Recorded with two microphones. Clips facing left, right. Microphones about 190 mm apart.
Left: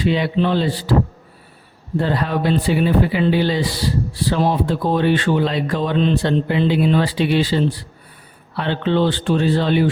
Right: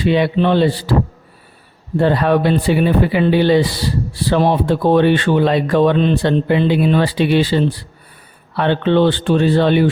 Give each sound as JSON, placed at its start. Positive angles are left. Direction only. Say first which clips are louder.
{"t": 0.0, "sound": "speech", "louder": "right 4 dB", "side_deg": -60}
{"t": 2.0, "sound": "speech", "louder": "right 6 dB", "side_deg": -65}